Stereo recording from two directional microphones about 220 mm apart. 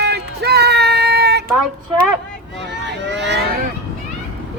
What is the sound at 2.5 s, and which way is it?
Vehicle, 50° right (ahead or behind).